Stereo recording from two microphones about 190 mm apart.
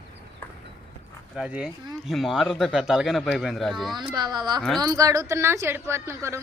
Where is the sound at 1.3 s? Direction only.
5° right (ahead or behind).